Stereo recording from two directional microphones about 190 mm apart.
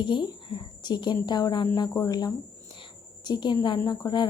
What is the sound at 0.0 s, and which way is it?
Speech, 25° left (ahead or behind).